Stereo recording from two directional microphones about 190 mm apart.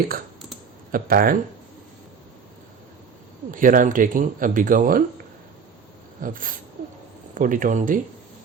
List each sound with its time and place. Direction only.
0.9 s speech: 50° right (ahead or behind)
3.5 s speech: 45° right (ahead or behind)
6.2 s speech: 45° right (ahead or behind)